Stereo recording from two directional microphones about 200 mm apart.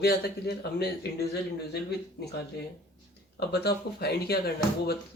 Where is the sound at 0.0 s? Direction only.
50° left (ahead or behind).